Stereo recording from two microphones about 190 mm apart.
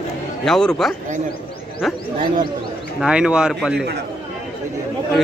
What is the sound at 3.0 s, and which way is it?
Speech, 5° right (ahead or behind).